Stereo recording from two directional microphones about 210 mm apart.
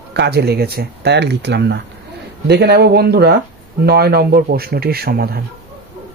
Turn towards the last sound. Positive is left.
turn(degrees=-45)  # may be behind; listen again after turning